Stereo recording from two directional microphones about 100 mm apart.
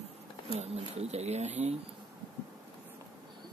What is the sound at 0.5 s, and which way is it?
Speech, 90° right.